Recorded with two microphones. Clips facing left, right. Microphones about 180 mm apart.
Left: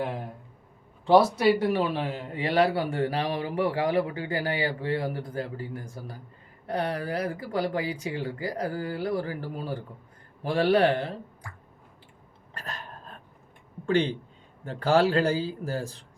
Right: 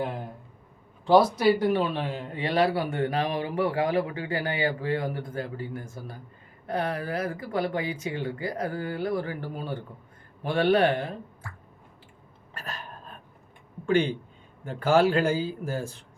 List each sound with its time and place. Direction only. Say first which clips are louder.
1.4 s speech: even; 25° left (ahead or behind)
1.7 s a man's voice: even; 25° right (ahead or behind)
2.6 s speech: even; 30° left (ahead or behind)
12.5 s a sound: even; 35° left (ahead or behind)
13.8 s speech: right 1 dB; 35° left (ahead or behind)